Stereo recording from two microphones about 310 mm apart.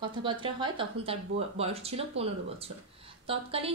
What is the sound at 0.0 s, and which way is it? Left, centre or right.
Speech, centre.